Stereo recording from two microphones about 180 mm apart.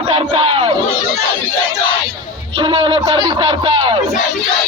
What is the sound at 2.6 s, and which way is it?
Speech, 25° right (ahead or behind).